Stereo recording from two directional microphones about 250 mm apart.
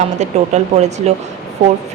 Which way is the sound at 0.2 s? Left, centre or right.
Right.